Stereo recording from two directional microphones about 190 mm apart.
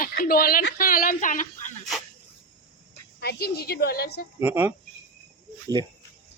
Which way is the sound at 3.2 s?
55° left (ahead or behind).